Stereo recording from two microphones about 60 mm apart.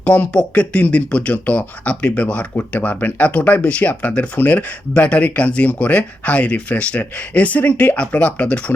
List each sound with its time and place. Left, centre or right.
0.0 s speech: left